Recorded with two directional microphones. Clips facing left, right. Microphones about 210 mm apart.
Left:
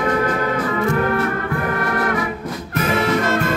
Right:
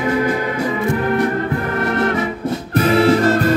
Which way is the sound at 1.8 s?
25° right (ahead or behind).